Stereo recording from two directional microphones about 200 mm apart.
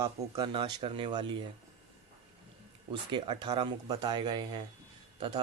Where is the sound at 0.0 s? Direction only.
20° right (ahead or behind).